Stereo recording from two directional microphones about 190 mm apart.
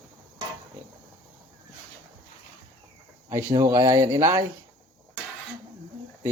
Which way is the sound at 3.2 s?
15° right (ahead or behind).